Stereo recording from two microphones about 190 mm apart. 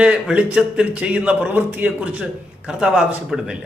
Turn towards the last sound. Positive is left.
turn(degrees=0)  # may be behind; listen again after turning